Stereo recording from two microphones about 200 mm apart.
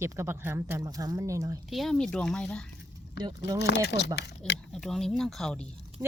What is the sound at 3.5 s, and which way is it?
Speech, 60° left (ahead or behind).